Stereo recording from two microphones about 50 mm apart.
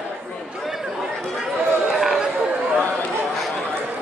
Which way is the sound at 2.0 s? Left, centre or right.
Centre.